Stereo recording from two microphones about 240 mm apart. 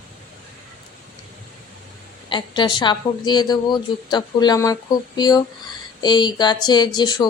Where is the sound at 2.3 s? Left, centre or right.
Centre.